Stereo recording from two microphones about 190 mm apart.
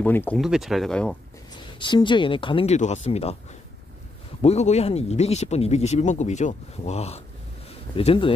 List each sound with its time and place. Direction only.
0.0 s speech: 10° left (ahead or behind)
0.4 s speech: centre (ahead or behind)
1.8 s speech: 25° left (ahead or behind)
4.4 s speech: 35° left (ahead or behind)